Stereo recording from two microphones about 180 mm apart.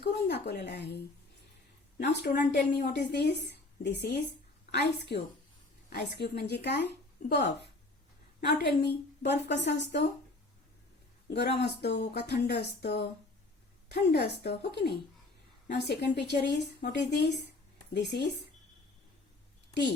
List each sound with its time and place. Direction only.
0.0 s a sound: 70° left (ahead or behind)
2.0 s a woman's voice: 70° left (ahead or behind)
7.2 s speech: 45° left (ahead or behind)
8.4 s a woman's voice: 65° left (ahead or behind)
11.6 s a woman's voice: 70° left (ahead or behind)
15.7 s a woman's voice: 70° left (ahead or behind)